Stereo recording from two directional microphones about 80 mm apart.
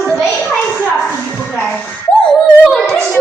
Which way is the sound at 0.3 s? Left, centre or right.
Left.